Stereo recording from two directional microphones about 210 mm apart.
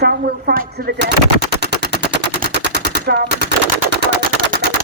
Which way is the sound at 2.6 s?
50° right (ahead or behind).